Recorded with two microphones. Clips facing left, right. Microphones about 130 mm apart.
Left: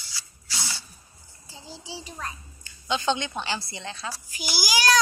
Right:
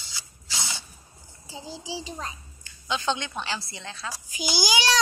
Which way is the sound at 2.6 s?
Centre (ahead or behind).